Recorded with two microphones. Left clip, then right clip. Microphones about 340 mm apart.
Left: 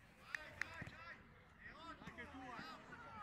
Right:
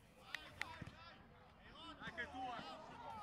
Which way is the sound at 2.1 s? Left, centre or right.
Right.